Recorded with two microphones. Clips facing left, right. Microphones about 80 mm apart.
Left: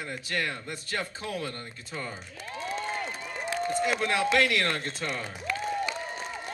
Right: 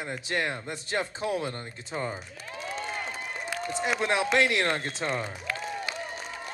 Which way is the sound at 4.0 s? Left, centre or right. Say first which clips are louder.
Right 3 dB; right.